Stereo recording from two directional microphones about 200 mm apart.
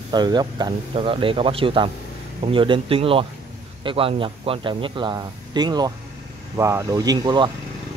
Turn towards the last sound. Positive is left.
turn(degrees=-20)  # may be behind; listen again after turning